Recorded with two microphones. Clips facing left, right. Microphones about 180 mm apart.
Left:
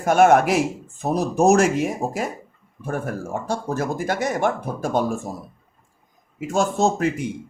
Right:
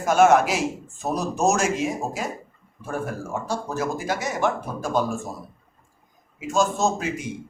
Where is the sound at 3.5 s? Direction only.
55° left (ahead or behind).